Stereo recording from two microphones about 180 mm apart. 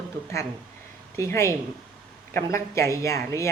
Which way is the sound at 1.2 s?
15° left (ahead or behind).